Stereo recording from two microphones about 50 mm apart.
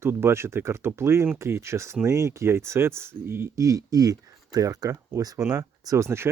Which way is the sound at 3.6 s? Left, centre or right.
Right.